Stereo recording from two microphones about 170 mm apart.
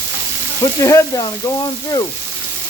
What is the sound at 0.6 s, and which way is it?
Speech, 20° left (ahead or behind).